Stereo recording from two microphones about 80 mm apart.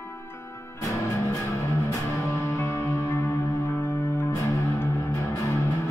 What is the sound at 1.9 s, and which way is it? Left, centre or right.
Music, left.